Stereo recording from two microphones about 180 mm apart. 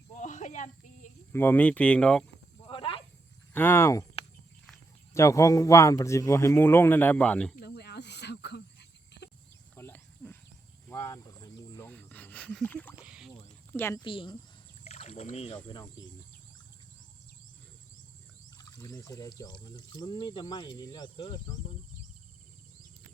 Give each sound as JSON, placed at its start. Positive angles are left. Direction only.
{"t": 0.1, "sound": "snake", "side_deg": 45}
{"t": 1.3, "sound": "a man's voice", "side_deg": 10}
{"t": 2.6, "sound": "snake", "side_deg": 30}
{"t": 3.5, "sound": "a man's voice", "side_deg": 10}
{"t": 5.1, "sound": "a man's voice", "side_deg": 15}
{"t": 7.6, "sound": "snake", "side_deg": 65}
{"t": 9.7, "sound": "cricket", "side_deg": 15}
{"t": 10.8, "sound": "wild animals", "side_deg": 15}
{"t": 13.0, "sound": "a sound", "side_deg": -5}
{"t": 13.7, "sound": "a man's voice", "side_deg": 15}
{"t": 14.0, "sound": "speech", "side_deg": 25}
{"t": 14.8, "sound": "a sound", "side_deg": 35}
{"t": 15.7, "sound": "speech", "side_deg": 20}
{"t": 18.5, "sound": "speech", "side_deg": 20}